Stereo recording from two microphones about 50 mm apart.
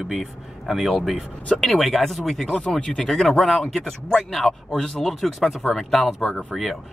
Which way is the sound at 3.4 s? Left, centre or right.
Centre.